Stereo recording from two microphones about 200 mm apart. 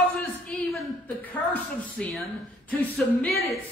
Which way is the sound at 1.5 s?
5° left (ahead or behind).